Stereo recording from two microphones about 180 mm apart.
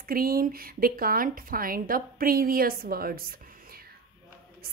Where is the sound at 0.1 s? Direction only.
55° right (ahead or behind).